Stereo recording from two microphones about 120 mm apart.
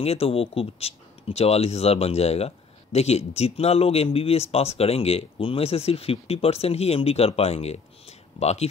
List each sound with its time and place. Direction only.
0.0 s speech: 55° left (ahead or behind)